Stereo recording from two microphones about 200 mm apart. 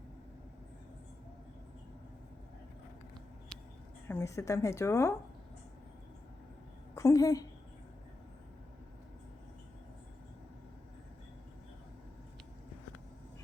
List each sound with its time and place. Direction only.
4.1 s speech: 15° left (ahead or behind)
6.9 s a woman's voice: 15° left (ahead or behind)